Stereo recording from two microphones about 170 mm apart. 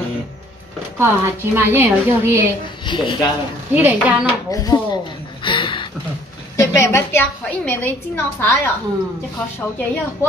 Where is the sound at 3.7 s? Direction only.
10° right (ahead or behind).